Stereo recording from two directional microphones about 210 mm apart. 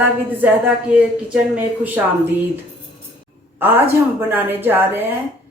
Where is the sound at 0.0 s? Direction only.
5° right (ahead or behind).